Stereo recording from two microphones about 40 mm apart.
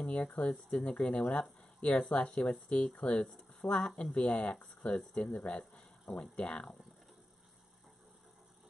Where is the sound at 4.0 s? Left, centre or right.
Left.